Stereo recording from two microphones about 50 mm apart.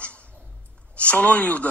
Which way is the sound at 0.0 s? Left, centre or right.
Left.